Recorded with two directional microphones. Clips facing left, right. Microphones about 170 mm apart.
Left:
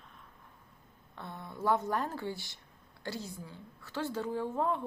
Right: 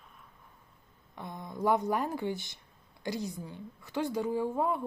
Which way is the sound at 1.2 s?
15° right (ahead or behind).